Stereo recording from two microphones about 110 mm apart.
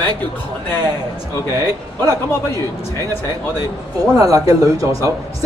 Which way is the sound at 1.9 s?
20° left (ahead or behind).